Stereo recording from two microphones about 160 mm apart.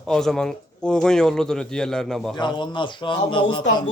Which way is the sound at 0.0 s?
5° left (ahead or behind).